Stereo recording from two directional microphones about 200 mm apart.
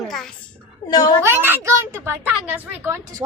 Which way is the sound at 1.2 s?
10° right (ahead or behind).